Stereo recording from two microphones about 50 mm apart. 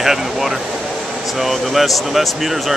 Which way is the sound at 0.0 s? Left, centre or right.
Centre.